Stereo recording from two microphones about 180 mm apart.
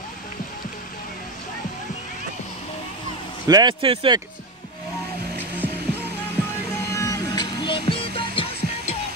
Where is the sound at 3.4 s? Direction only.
25° right (ahead or behind).